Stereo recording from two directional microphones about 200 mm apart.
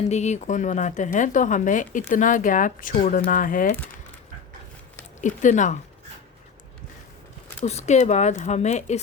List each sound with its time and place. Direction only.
0.1 s speech: 35° left (ahead or behind)
5.2 s speech: 40° left (ahead or behind)
7.6 s speech: 35° left (ahead or behind)